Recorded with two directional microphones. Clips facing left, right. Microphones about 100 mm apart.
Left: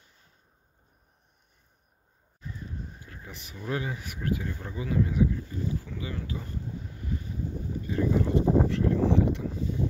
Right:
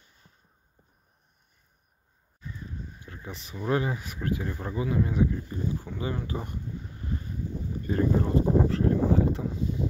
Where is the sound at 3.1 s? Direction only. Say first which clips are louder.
Right 4 dB; 30° right (ahead or behind).